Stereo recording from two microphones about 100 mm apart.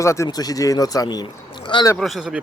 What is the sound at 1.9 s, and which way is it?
Speech, centre (ahead or behind).